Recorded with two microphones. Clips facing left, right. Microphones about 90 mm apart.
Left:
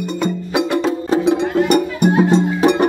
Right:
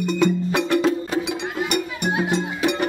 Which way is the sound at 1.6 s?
40° left (ahead or behind).